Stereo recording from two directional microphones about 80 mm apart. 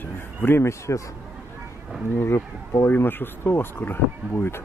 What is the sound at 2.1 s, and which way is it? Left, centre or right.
Speech, left.